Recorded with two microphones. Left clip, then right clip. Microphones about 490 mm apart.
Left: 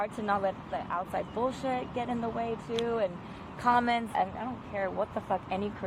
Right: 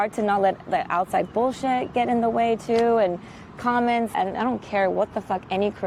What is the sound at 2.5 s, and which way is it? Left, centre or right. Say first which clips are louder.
Speech: right 12 dB; right.